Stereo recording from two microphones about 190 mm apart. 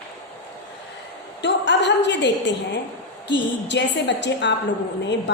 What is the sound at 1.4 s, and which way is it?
A woman's voice, 70° left (ahead or behind).